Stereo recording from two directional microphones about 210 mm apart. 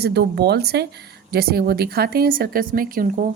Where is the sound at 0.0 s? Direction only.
50° right (ahead or behind).